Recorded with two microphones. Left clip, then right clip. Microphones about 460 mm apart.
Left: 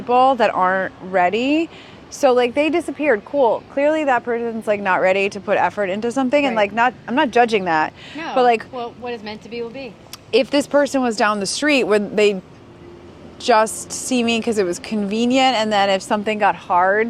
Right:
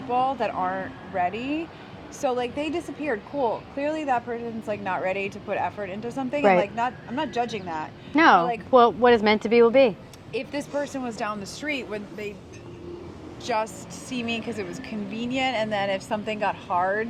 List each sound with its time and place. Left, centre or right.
0.1 s a woman's voice: left
8.4 s a woman's voice: left
8.7 s speech: right
10.3 s speech: left
13.4 s a woman's voice: left